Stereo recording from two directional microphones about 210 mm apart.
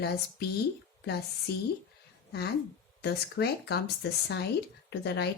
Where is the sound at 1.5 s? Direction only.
50° left (ahead or behind).